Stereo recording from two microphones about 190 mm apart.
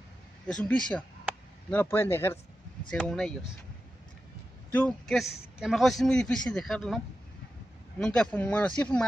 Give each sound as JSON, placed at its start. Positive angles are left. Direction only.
{"t": 0.5, "sound": "a man's voice", "side_deg": 5}
{"t": 4.7, "sound": "a man's voice", "side_deg": 5}
{"t": 8.0, "sound": "speech", "side_deg": 5}